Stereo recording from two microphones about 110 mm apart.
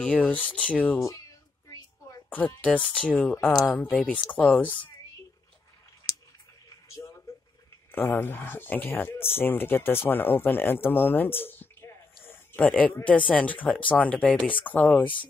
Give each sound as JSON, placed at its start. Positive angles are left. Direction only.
{"t": 0.0, "sound": "speech", "side_deg": 10}
{"t": 0.9, "sound": "speech", "side_deg": 25}
{"t": 1.7, "sound": "a sound", "side_deg": 30}
{"t": 2.2, "sound": "speech", "side_deg": 15}
{"t": 4.3, "sound": "speech", "side_deg": 15}
{"t": 6.0, "sound": "a sound", "side_deg": 40}
{"t": 7.9, "sound": "speech", "side_deg": 20}
{"t": 12.3, "sound": "a sound", "side_deg": 15}
{"t": 13.0, "sound": "speech", "side_deg": 10}